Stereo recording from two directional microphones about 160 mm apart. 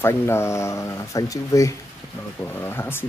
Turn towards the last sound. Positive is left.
turn(degrees=15)  # may be behind; listen again after turning